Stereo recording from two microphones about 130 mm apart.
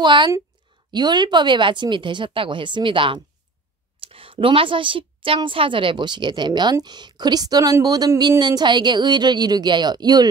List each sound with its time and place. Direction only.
0.0 s a woman's voice: 35° right (ahead or behind)